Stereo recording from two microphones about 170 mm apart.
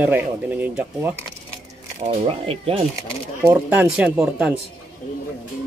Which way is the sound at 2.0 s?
35° right (ahead or behind).